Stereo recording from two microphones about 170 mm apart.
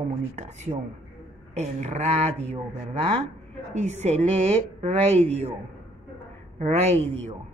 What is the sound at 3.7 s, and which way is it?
Speech, 40° right (ahead or behind).